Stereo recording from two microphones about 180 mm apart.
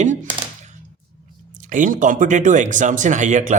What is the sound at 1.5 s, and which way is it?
Speech, 45° right (ahead or behind).